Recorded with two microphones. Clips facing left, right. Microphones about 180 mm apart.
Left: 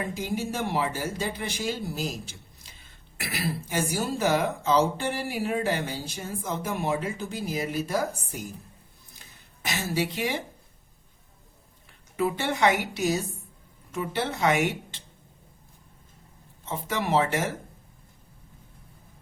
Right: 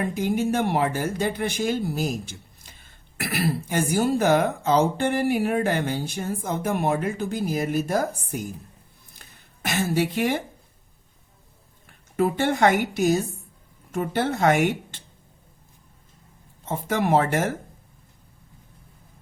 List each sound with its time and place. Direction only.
0.0 s speech: 55° right (ahead or behind)
9.6 s speech: 55° right (ahead or behind)
11.9 s speech: 50° right (ahead or behind)
16.6 s speech: 50° right (ahead or behind)